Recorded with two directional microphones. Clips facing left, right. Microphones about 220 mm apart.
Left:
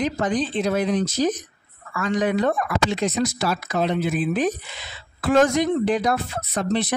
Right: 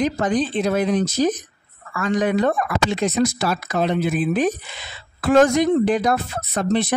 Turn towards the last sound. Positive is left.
turn(degrees=-50)  # may be behind; listen again after turning